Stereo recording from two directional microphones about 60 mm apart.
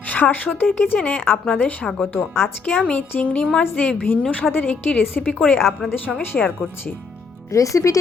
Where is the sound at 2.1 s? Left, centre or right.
Left.